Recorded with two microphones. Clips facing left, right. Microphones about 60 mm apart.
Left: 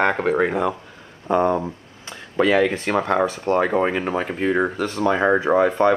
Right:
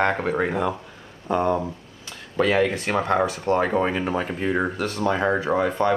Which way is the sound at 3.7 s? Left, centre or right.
Left.